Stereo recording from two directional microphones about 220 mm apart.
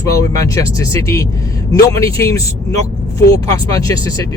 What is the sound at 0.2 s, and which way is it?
Speech, 15° left (ahead or behind).